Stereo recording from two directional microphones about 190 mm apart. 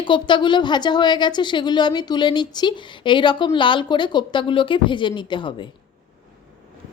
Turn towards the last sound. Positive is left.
turn(degrees=25)  # may be behind; listen again after turning